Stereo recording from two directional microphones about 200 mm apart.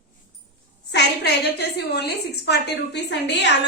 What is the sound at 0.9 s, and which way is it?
A woman's voice, 55° left (ahead or behind).